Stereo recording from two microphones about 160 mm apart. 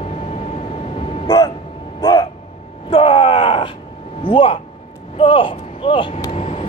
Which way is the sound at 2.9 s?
35° left (ahead or behind).